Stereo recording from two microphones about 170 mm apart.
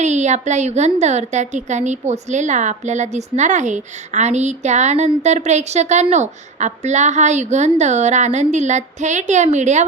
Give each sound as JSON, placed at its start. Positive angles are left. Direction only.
{"t": 0.0, "sound": "a woman's voice", "side_deg": -45}